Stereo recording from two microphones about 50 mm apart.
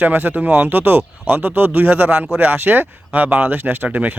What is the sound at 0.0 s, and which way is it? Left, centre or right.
Speech, right.